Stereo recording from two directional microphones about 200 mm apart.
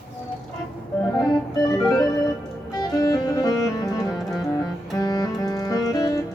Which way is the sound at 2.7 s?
20° left (ahead or behind).